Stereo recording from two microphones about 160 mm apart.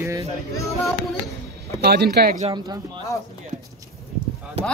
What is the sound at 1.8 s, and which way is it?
Speech, 85° right.